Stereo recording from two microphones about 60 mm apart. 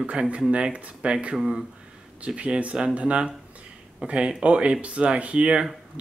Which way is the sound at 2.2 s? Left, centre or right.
Centre.